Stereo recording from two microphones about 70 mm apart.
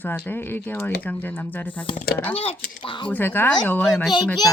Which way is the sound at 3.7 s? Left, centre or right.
Centre.